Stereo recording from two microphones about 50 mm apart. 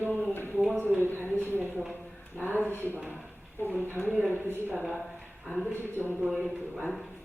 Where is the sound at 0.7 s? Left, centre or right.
Right.